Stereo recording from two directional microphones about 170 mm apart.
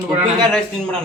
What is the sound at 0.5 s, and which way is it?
Speech, 5° left (ahead or behind).